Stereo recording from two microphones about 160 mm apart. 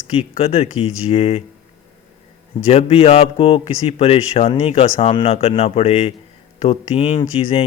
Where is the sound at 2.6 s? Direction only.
40° left (ahead or behind).